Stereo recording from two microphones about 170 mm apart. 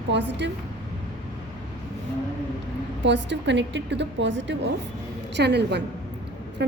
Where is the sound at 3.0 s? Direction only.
90° right.